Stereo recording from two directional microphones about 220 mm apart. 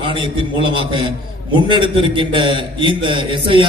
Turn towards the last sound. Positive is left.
turn(degrees=-20)  # may be behind; listen again after turning